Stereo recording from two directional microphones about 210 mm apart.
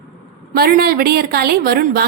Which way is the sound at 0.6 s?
45° right (ahead or behind).